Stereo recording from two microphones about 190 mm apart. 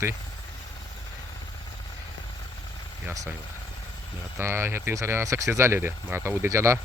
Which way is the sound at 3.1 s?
15° right (ahead or behind).